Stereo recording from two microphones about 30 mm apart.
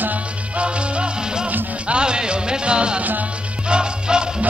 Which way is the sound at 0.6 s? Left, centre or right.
Right.